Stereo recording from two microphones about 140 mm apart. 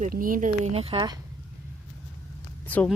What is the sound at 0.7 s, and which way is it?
Speech, 45° right (ahead or behind).